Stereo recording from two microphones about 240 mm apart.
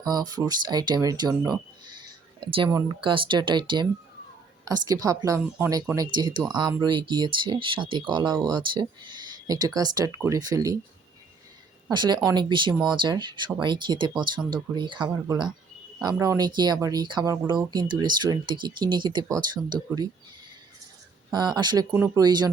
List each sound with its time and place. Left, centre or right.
0.0 s speech: centre
2.6 s speech: centre
11.9 s speech: centre
21.3 s speech: centre